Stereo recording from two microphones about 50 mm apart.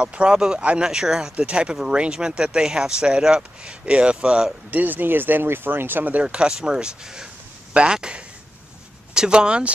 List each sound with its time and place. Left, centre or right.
0.0 s speech: right
0.8 s speech: centre
1.3 s speech: right
4.6 s speech: right
6.2 s speech: centre
7.7 s a sound: centre
9.1 s speech: centre